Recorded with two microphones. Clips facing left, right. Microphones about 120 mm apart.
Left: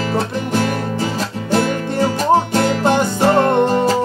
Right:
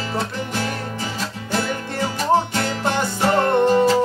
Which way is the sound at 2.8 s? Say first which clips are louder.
Left 4 dB; 25° left (ahead or behind).